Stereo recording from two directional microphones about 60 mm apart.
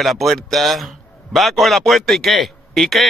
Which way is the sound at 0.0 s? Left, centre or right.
Centre.